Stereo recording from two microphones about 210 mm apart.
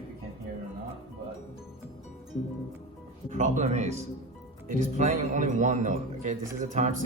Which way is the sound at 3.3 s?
35° right (ahead or behind).